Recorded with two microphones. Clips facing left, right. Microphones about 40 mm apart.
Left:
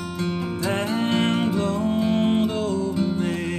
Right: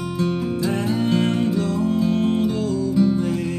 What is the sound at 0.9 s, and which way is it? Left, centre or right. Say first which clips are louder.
Music: right 1 dB; left.